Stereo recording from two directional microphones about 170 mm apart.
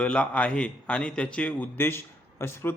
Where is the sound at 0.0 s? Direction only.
5° left (ahead or behind).